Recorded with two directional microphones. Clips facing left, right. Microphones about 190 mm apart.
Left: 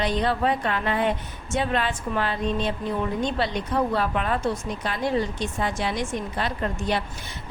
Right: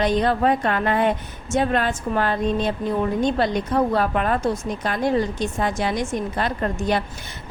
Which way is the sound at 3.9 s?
45° right (ahead or behind).